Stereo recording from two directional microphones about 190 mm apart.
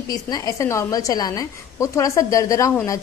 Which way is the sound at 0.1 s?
20° left (ahead or behind).